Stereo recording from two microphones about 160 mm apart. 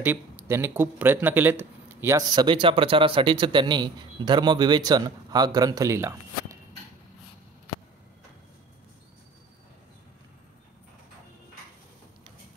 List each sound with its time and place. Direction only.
0.0 s speech: 15° right (ahead or behind)